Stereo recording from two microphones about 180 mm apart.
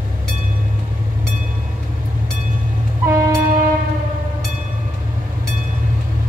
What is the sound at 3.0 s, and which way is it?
Train, 15° right (ahead or behind).